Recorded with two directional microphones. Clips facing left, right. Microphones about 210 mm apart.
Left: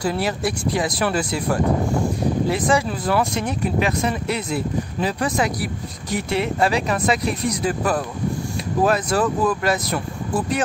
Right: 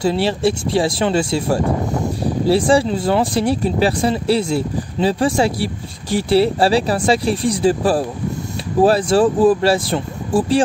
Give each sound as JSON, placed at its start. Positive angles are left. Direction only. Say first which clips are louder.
{"t": 0.0, "sound": "speech", "louder": "right 6 dB", "side_deg": -25}